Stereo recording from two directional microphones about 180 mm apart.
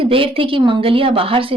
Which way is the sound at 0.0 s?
30° right (ahead or behind).